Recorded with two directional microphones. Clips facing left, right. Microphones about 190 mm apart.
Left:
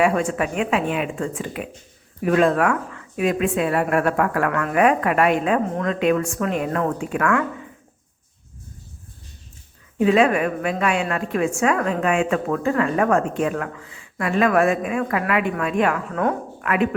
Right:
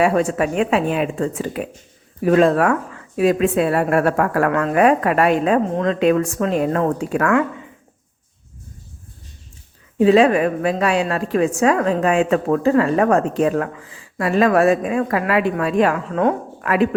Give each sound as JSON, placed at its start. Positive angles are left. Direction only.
{"t": 0.0, "sound": "a woman's voice", "side_deg": -35}
{"t": 10.0, "sound": "a woman's voice", "side_deg": -30}